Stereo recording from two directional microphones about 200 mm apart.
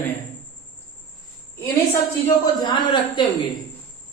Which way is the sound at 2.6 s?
25° left (ahead or behind).